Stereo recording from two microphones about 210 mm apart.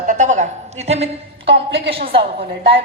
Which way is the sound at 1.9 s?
25° right (ahead or behind).